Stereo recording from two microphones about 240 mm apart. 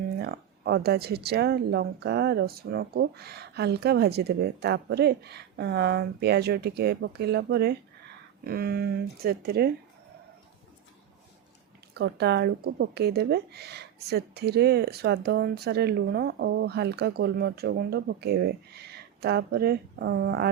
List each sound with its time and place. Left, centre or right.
0.2 s speech: right
11.9 s speech: right